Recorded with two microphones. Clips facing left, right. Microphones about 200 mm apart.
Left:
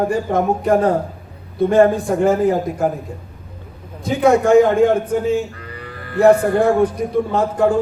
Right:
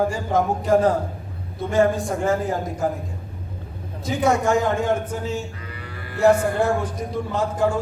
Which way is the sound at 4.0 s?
60° left (ahead or behind).